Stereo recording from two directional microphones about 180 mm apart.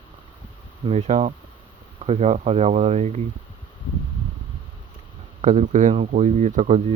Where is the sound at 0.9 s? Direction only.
40° right (ahead or behind).